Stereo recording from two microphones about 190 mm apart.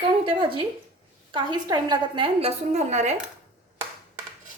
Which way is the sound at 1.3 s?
25° right (ahead or behind).